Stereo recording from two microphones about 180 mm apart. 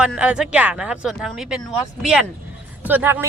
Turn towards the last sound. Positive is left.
turn(degrees=-10)  # may be behind; listen again after turning